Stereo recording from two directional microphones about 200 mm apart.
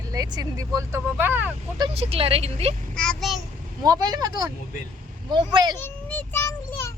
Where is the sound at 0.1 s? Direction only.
20° right (ahead or behind).